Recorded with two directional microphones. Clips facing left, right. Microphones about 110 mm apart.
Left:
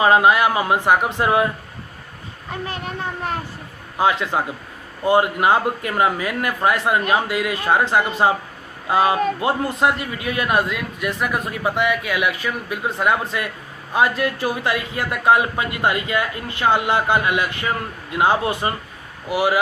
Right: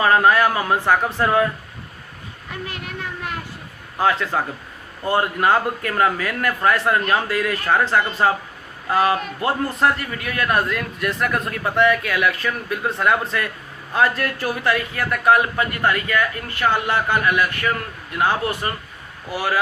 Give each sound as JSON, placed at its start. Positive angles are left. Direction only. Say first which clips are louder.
{"t": 0.0, "sound": "a man's voice", "louder": "left 1 dB", "side_deg": 20}
{"t": 2.5, "sound": "a child's voice", "louder": "left 4 dB", "side_deg": 35}
{"t": 3.9, "sound": "a man's voice", "louder": "left 1 dB", "side_deg": 15}